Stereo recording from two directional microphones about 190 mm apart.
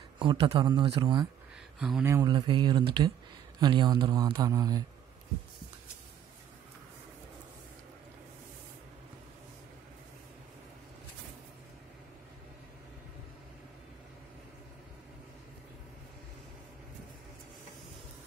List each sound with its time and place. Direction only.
0.2 s a man's voice: 25° right (ahead or behind)
1.8 s speech: centre (ahead or behind)
2.0 s a man's voice: 20° right (ahead or behind)